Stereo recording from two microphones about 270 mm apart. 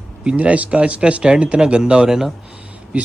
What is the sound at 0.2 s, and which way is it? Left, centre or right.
A man's voice, centre.